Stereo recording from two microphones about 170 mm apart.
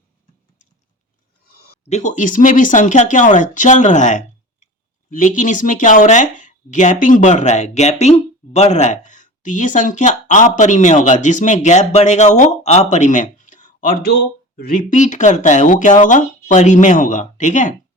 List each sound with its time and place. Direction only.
1.8 s speech: 40° left (ahead or behind)